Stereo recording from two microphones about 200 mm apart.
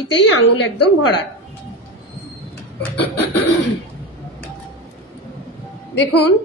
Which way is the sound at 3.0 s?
55° left (ahead or behind).